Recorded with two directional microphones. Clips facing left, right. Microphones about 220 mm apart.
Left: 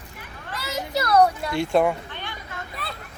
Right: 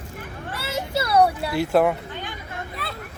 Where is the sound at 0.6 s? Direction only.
30° right (ahead or behind).